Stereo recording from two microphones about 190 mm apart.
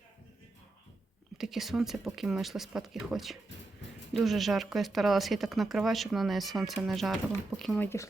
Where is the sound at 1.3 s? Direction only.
Centre (ahead or behind).